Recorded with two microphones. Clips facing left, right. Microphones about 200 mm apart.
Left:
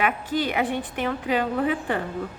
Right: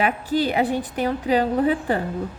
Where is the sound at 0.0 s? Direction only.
30° right (ahead or behind).